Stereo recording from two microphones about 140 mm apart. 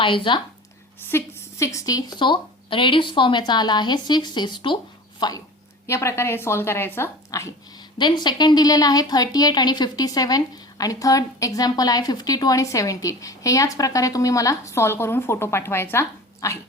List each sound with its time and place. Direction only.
0.0 s speech: 35° left (ahead or behind)
1.0 s a woman's voice: 20° left (ahead or behind)
7.9 s a woman's voice: 30° left (ahead or behind)